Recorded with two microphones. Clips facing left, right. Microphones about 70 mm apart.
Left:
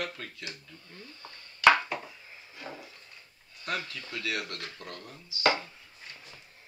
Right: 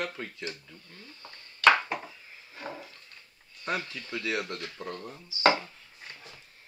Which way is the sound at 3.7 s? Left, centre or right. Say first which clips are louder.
Right 2 dB; right.